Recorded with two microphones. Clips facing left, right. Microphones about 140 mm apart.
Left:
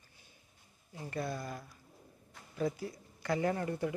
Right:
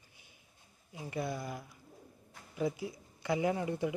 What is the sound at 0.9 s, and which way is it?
Speech, 15° right (ahead or behind).